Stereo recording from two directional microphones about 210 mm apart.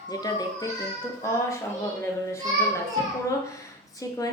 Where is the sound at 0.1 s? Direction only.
20° left (ahead or behind).